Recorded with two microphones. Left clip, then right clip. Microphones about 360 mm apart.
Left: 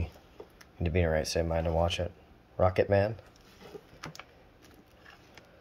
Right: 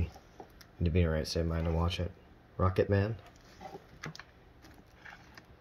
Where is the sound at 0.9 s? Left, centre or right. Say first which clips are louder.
Left 5 dB; left.